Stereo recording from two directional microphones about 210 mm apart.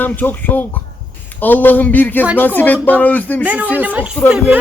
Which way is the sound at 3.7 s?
10° right (ahead or behind).